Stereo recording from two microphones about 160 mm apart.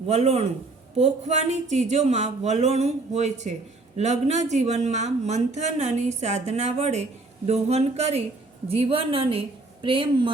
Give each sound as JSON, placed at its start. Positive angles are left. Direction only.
{"t": 0.1, "sound": "speech", "side_deg": -40}